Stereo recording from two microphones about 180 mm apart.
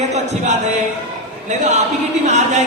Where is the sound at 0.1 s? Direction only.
40° right (ahead or behind).